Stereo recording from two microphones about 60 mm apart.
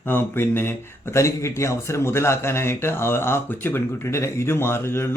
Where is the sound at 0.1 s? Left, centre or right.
Left.